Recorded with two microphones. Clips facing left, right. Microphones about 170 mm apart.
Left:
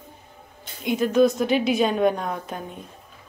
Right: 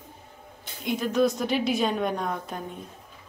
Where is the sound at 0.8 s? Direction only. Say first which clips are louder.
Left 5 dB; centre (ahead or behind).